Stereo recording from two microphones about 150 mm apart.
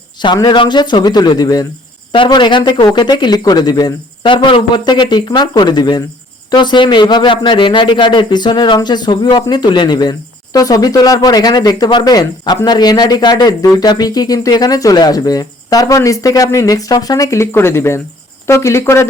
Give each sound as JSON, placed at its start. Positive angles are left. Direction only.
{"t": 0.2, "sound": "a man's voice", "side_deg": 30}